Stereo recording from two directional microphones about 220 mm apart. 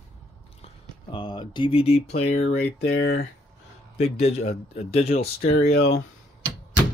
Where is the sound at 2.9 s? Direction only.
50° left (ahead or behind).